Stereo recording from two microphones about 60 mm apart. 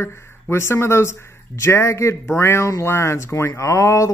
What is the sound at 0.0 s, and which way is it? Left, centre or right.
Speech, left.